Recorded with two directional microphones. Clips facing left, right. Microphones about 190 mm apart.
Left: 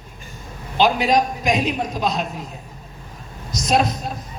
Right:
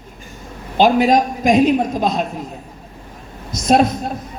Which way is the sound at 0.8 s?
50° right (ahead or behind).